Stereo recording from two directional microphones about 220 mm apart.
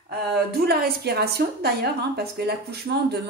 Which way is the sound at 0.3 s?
45° right (ahead or behind).